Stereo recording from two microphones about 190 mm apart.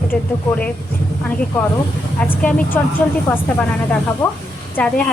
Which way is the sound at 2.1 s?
10° left (ahead or behind).